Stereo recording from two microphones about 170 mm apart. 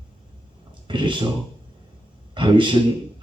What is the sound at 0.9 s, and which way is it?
Speech, 30° right (ahead or behind).